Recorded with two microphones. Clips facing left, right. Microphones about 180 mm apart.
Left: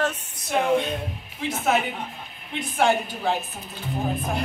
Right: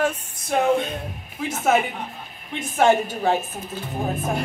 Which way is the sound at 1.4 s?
45° right (ahead or behind).